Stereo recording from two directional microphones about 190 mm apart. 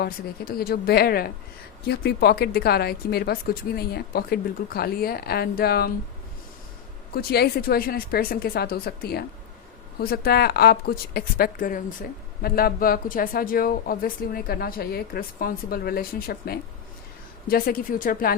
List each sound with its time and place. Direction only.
0.0 s speech: 55° left (ahead or behind)
7.1 s speech: 55° left (ahead or behind)